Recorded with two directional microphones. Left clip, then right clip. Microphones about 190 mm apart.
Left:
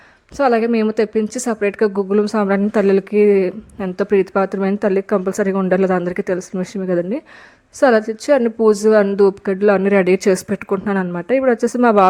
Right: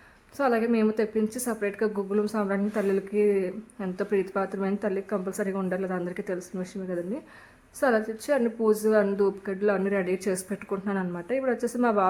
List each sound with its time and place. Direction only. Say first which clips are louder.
0.3 s a woman's voice: left 9 dB; 45° left (ahead or behind)